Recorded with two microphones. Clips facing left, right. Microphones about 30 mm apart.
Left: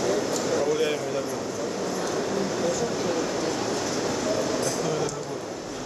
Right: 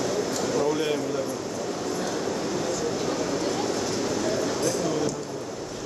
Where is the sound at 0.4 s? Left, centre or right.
Centre.